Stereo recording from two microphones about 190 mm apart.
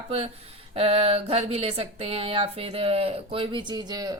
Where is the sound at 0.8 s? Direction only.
30° right (ahead or behind).